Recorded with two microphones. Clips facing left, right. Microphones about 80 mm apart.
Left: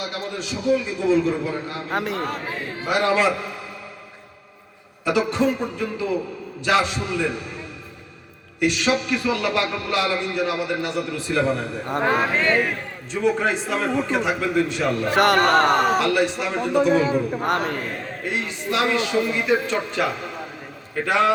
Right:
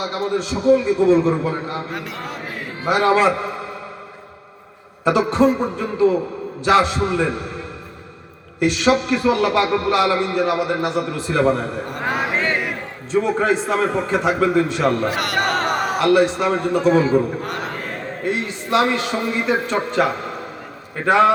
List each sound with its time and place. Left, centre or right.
0.0 s a man's voice: right
1.9 s a man's voice: left
2.8 s a man's voice: right
5.0 s a man's voice: right
8.6 s a man's voice: right
12.0 s speech: centre
13.1 s a man's voice: right
15.1 s a man's voice: left
15.6 s speech: centre
16.0 s a man's voice: right
18.3 s a man's voice: right